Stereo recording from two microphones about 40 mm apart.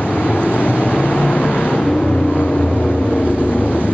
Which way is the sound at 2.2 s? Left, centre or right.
Left.